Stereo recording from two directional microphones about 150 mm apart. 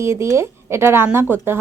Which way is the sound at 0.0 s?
20° right (ahead or behind).